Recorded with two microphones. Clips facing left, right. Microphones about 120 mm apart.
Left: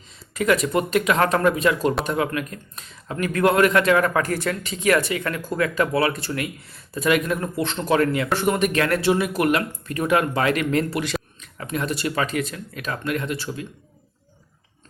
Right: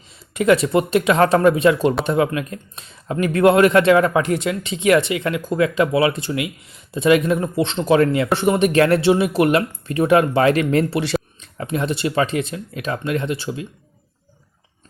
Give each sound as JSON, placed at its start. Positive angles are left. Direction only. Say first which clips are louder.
{"t": 0.3, "sound": "speech", "louder": "right 5 dB", "side_deg": -25}